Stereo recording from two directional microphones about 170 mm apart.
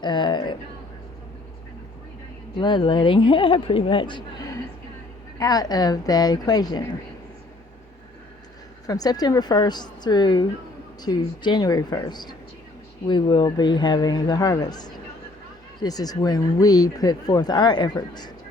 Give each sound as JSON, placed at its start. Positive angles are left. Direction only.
{"t": 0.0, "sound": "a sound", "side_deg": 25}
{"t": 2.6, "sound": "speech", "side_deg": 25}
{"t": 8.9, "sound": "speech", "side_deg": 20}